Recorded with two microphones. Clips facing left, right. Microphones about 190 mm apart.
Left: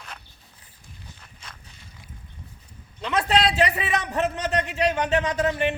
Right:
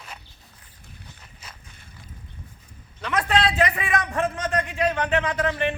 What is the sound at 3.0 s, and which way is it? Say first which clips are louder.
A man's voice: left 1 dB; 25° left (ahead or behind).